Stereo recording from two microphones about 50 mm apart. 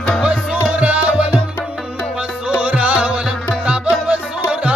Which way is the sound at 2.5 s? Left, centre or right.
Right.